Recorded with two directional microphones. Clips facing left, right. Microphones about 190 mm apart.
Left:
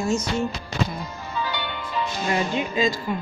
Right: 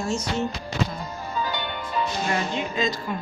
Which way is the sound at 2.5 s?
10° left (ahead or behind).